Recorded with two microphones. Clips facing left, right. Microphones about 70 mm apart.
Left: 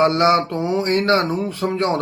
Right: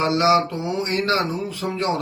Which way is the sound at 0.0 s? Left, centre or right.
Left.